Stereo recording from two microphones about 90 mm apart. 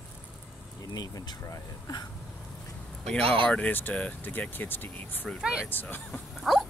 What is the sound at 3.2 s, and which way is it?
Speech, 90° right.